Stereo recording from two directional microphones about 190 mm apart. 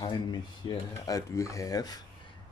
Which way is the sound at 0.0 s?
20° left (ahead or behind).